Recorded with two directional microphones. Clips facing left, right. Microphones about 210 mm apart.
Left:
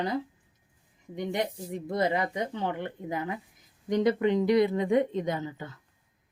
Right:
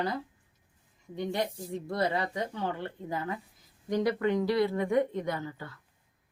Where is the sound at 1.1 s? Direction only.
20° left (ahead or behind).